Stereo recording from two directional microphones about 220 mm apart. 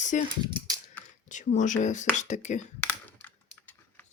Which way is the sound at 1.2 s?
35° left (ahead or behind).